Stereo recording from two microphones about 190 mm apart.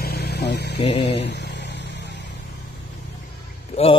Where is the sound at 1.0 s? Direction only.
65° left (ahead or behind).